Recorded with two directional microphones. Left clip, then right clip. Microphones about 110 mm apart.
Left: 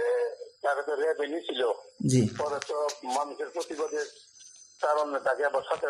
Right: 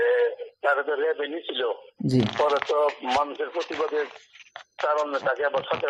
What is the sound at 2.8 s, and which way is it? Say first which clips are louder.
Speech: right 7 dB; 30° right (ahead or behind).